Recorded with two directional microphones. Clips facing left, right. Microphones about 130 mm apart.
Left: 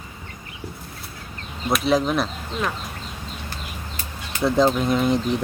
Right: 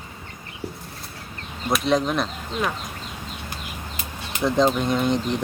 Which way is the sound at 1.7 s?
5° left (ahead or behind).